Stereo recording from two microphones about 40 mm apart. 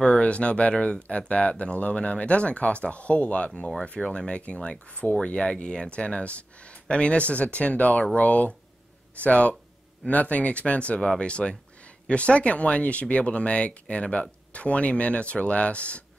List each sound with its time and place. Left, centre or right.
0.0 s speech: left
4.0 s speech: centre
4.3 s speech: left
11.0 s speech: left